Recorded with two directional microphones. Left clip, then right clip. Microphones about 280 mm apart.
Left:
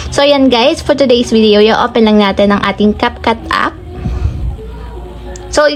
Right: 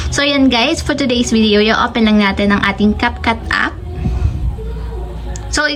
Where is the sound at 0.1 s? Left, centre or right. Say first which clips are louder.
Left 5 dB; centre.